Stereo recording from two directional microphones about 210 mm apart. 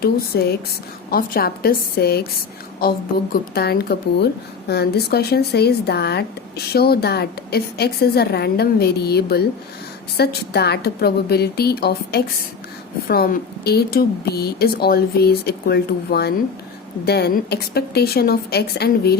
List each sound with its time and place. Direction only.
0.0 s speech: 50° left (ahead or behind)
3.5 s speech: 45° left (ahead or behind)